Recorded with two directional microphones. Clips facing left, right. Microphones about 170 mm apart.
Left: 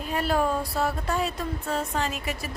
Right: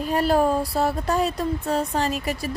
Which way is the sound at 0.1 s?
40° right (ahead or behind).